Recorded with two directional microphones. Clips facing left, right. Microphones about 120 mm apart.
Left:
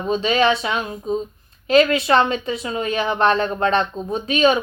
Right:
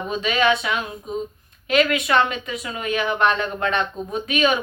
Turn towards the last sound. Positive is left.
turn(degrees=30)  # may be behind; listen again after turning